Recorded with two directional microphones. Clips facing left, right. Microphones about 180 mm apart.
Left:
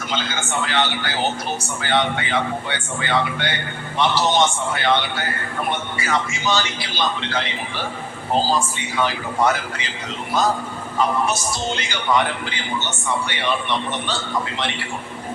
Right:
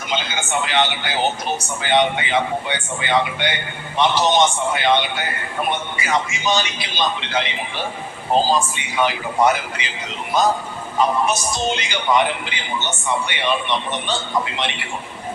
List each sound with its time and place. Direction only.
0.1 s a man's voice: 20° right (ahead or behind)